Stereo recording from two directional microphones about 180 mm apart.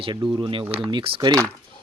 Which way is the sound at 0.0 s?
25° right (ahead or behind).